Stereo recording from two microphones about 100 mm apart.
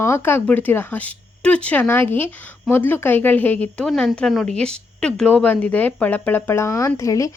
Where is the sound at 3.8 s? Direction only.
Centre (ahead or behind); by 7.3 s 35° left (ahead or behind).